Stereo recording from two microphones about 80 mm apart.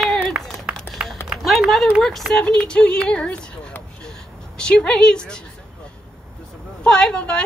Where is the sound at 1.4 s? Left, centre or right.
Centre.